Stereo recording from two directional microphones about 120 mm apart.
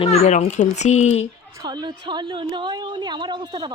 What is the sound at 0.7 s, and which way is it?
Speech, 70° left (ahead or behind).